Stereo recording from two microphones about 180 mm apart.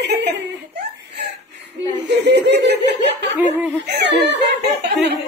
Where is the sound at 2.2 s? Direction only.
70° right (ahead or behind).